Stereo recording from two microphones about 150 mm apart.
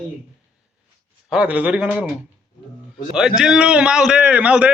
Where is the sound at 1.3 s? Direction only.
10° right (ahead or behind).